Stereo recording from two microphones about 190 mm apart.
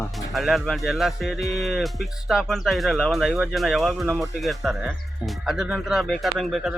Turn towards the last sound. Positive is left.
turn(degrees=0)  # may be behind; listen again after turning